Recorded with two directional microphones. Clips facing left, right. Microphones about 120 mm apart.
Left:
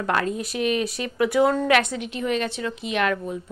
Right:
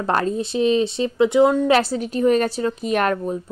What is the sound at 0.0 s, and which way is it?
A woman's voice, 35° right (ahead or behind).